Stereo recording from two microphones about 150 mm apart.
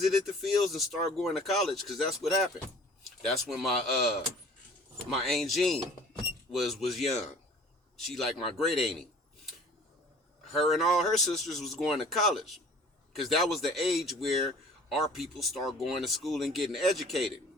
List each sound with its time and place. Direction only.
0.0 s speech: centre (ahead or behind)
10.5 s speech: centre (ahead or behind)